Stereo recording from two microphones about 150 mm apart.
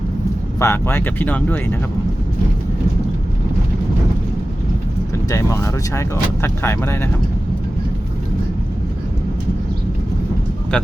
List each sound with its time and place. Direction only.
0.6 s speech: 15° left (ahead or behind)
5.3 s speech: 20° left (ahead or behind)